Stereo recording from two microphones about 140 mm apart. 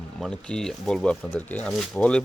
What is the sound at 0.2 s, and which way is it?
Speech, 5° left (ahead or behind).